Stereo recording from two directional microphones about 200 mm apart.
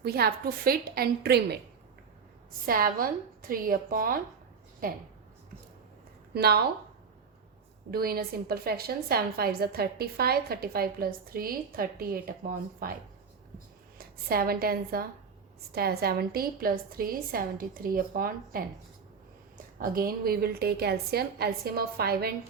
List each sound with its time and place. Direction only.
0.0 s a woman's voice: 50° right (ahead or behind)
2.6 s a woman's voice: 45° right (ahead or behind)
6.3 s a woman's voice: 50° right (ahead or behind)
7.9 s a woman's voice: 50° right (ahead or behind)
14.0 s a woman's voice: 50° right (ahead or behind)
19.8 s a woman's voice: 45° right (ahead or behind)